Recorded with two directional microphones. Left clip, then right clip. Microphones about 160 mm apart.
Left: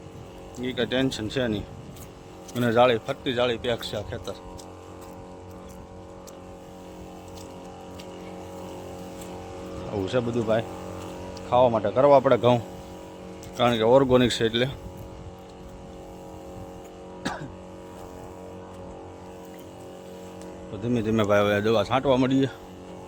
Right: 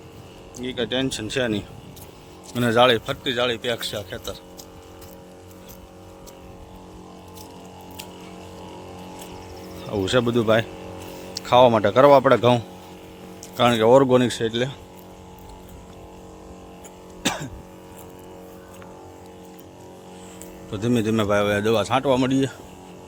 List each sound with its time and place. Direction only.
0.5 s speech: centre (ahead or behind)
1.3 s speech: 15° right (ahead or behind)
3.2 s speech: centre (ahead or behind)
9.9 s speech: 30° right (ahead or behind)
12.1 s speech: 20° right (ahead or behind)
14.2 s speech: centre (ahead or behind)
20.7 s speech: 35° right (ahead or behind)
21.2 s speech: centre (ahead or behind)